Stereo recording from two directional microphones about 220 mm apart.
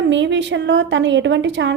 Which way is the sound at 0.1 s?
55° right (ahead or behind).